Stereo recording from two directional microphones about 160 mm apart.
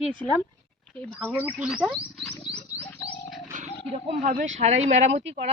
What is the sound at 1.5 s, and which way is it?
Speech, 10° right (ahead or behind).